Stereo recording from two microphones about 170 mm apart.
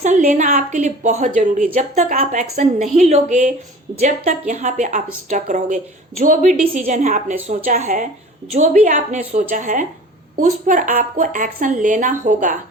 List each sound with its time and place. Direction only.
0.0 s speech: 45° right (ahead or behind)